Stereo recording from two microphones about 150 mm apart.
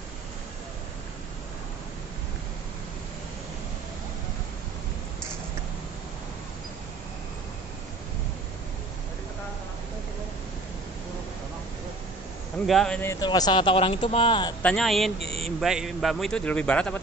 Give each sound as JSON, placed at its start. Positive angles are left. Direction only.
{"t": 12.6, "sound": "a man's voice", "side_deg": 5}
{"t": 13.2, "sound": "speech", "side_deg": 30}
{"t": 14.6, "sound": "a man's voice", "side_deg": 5}